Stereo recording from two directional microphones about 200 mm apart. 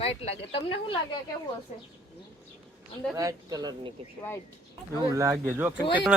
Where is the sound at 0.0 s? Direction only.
30° left (ahead or behind).